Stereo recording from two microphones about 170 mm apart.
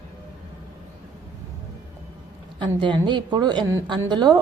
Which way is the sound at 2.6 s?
25° right (ahead or behind).